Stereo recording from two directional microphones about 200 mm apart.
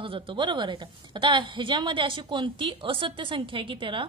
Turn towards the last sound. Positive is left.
turn(degrees=-25)  # may be behind; listen again after turning